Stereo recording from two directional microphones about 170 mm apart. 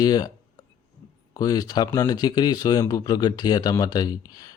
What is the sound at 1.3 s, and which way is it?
Speech, 20° left (ahead or behind).